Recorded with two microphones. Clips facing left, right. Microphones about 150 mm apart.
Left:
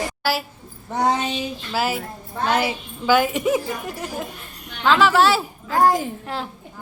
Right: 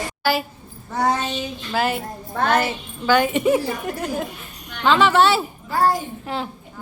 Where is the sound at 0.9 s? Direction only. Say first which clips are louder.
Even; 20° left (ahead or behind).